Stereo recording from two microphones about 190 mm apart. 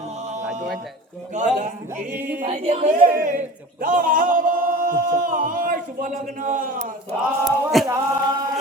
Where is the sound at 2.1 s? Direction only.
10° right (ahead or behind).